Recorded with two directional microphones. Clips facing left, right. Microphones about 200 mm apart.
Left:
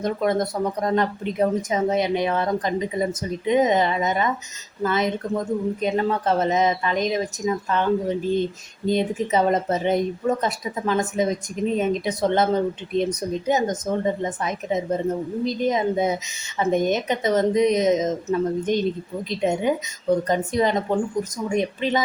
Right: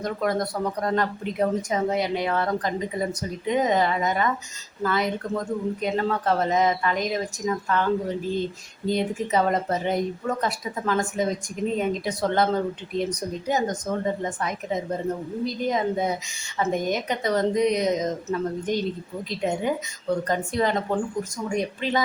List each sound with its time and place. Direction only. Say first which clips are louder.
0.0 s a woman's voice: left 3 dB; 20° left (ahead or behind)